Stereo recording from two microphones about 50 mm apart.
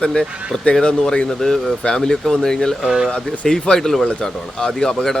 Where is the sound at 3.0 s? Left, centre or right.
Left.